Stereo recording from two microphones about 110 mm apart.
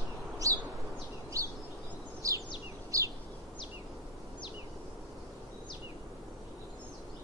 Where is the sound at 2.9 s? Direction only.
30° right (ahead or behind).